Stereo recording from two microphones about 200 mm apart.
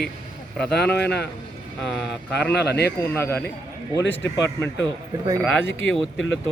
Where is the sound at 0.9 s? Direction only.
55° left (ahead or behind).